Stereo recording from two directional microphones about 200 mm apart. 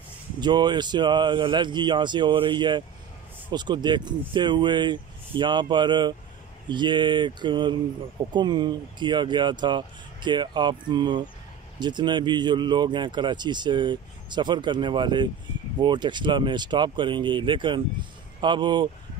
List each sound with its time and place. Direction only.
0.4 s speech: 20° right (ahead or behind)